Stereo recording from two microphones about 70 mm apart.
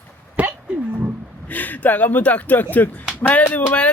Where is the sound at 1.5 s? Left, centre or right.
Left.